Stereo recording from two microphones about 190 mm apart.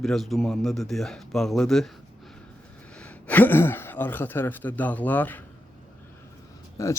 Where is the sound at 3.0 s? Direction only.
10° left (ahead or behind).